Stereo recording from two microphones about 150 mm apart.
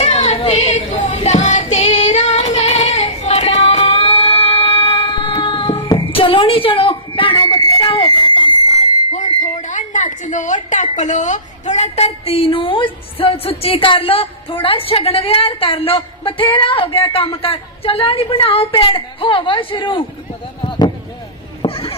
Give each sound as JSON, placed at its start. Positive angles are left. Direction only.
{"t": 0.0, "sound": "child singing", "side_deg": 45}
{"t": 9.1, "sound": "a woman's voice", "side_deg": 55}
{"t": 20.6, "sound": "a sound", "side_deg": 30}